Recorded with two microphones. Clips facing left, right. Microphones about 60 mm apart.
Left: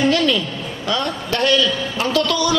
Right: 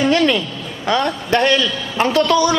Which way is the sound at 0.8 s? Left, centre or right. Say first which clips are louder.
Right 5 dB; right.